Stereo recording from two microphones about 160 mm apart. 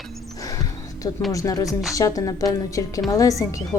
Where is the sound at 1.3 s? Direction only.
20° left (ahead or behind).